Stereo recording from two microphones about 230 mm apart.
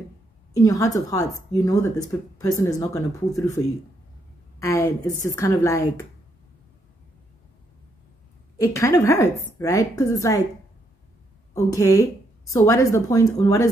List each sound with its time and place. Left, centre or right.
0.5 s a woman's voice: centre
8.5 s a woman's voice: centre
11.5 s a woman's voice: centre